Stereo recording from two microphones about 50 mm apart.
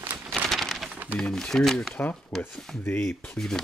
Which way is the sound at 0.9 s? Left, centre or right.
Right.